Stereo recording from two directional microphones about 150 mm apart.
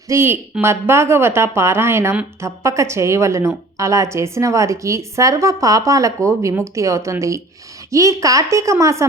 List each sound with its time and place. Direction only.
0.1 s a woman's voice: 15° right (ahead or behind)